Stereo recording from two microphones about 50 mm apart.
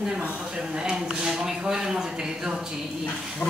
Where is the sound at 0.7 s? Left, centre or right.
Centre.